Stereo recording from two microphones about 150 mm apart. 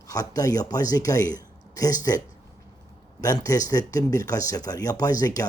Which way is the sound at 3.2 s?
25° left (ahead or behind).